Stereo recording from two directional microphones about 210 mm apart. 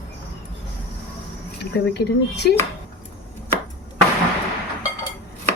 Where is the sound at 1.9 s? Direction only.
50° left (ahead or behind).